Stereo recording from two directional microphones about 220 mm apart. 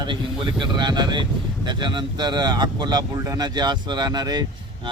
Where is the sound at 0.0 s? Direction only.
20° right (ahead or behind).